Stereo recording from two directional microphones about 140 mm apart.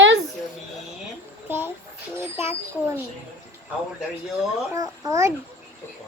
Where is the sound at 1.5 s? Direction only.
15° right (ahead or behind).